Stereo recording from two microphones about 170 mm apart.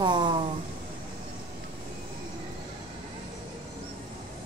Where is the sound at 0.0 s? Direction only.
25° right (ahead or behind).